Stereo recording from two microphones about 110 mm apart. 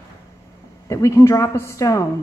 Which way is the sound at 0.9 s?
30° left (ahead or behind).